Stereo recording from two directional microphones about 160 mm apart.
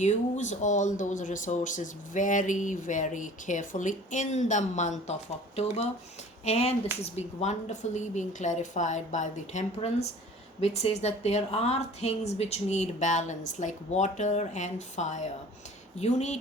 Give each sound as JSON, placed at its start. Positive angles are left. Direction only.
{"t": 0.0, "sound": "speech", "side_deg": 50}